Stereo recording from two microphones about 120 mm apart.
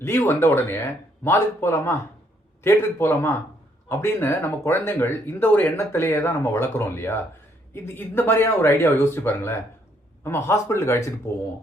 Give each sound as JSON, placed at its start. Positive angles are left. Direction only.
{"t": 0.0, "sound": "speech", "side_deg": 20}